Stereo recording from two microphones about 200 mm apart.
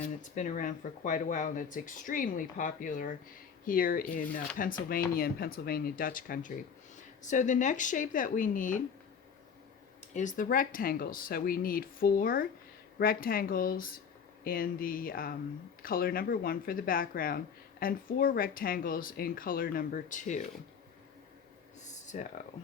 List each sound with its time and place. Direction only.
0.0 s speech: 40° left (ahead or behind)
10.2 s speech: 40° left (ahead or behind)
21.8 s a sound: 35° left (ahead or behind)